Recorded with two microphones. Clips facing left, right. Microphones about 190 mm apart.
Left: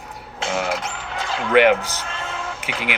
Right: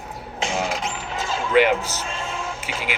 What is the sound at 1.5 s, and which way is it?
Speech, 60° left (ahead or behind).